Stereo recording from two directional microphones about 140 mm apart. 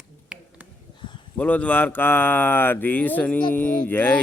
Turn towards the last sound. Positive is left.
turn(degrees=10)  # may be behind; listen again after turning